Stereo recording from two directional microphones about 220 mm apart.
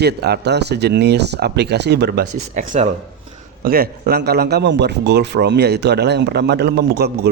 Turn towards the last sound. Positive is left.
turn(degrees=-50)  # may be behind; listen again after turning